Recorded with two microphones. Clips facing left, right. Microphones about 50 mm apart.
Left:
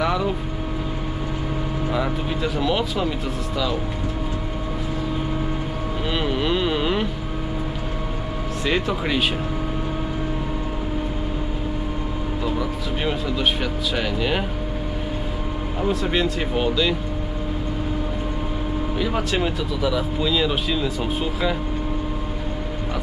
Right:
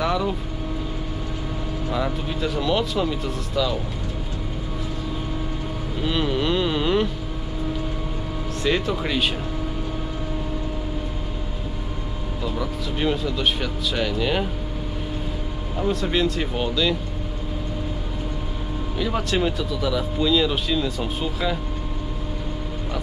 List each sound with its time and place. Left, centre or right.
0.0 s vehicle: centre
1.9 s speech: centre
6.0 s speech: centre
8.6 s speech: centre
12.4 s speech: centre
15.8 s speech: centre
18.9 s speech: centre